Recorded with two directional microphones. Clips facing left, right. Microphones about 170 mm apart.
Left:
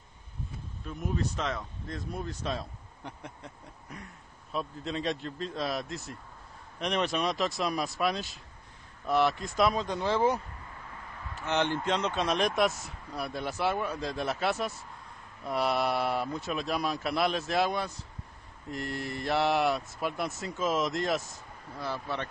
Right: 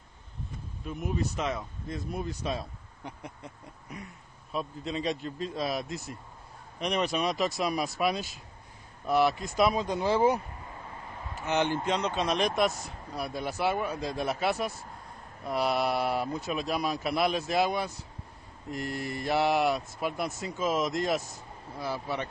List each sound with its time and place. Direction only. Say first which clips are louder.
0.8 s speech: right 1 dB; 10° right (ahead or behind)
11.4 s speech: right 1 dB; 5° right (ahead or behind)